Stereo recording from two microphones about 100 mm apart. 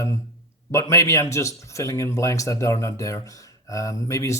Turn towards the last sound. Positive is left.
turn(degrees=30)  # may be behind; listen again after turning